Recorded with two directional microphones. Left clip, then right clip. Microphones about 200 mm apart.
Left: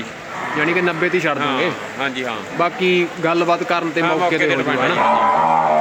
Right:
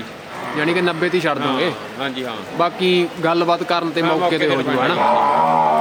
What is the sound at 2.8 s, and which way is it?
Speech, 45° right (ahead or behind).